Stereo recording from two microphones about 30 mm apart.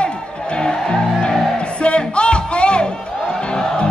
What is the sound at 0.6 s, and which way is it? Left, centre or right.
Music, left.